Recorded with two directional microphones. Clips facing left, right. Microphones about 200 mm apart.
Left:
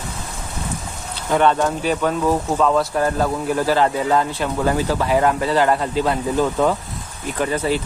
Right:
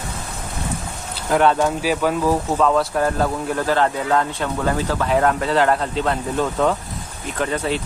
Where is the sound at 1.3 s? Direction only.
5° right (ahead or behind).